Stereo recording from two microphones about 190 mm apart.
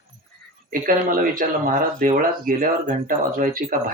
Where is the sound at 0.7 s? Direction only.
45° right (ahead or behind).